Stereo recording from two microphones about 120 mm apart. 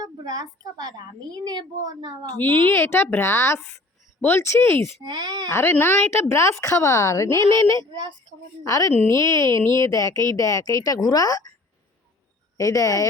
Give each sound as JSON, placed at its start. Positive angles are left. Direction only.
{"t": 0.0, "sound": "a woman's voice", "side_deg": -30}
{"t": 2.4, "sound": "speech", "side_deg": 15}
{"t": 5.0, "sound": "a woman's voice", "side_deg": -35}
{"t": 5.5, "sound": "speech", "side_deg": 20}
{"t": 7.8, "sound": "a woman's voice", "side_deg": -40}
{"t": 8.6, "sound": "speech", "side_deg": 25}
{"t": 12.5, "sound": "speech", "side_deg": 25}